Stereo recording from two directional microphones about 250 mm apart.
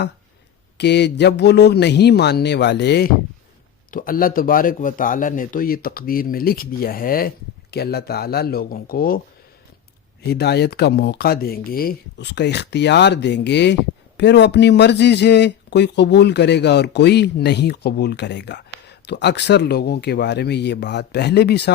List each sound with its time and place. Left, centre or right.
0.8 s speech: left
10.2 s speech: left